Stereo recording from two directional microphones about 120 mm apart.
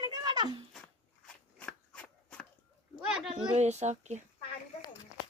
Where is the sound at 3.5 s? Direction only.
70° right (ahead or behind).